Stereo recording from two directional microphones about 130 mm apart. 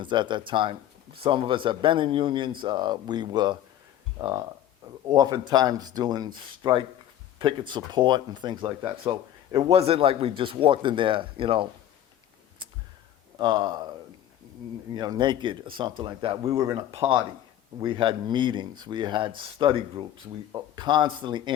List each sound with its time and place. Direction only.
0.0 s speech: 35° right (ahead or behind)
9.6 s speech: 50° right (ahead or behind)
13.4 s speech: 30° right (ahead or behind)
14.9 s speech: 35° right (ahead or behind)
17.7 s speech: 35° right (ahead or behind)